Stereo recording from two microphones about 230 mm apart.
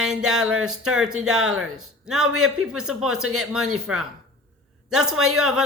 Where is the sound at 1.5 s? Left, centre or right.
Right.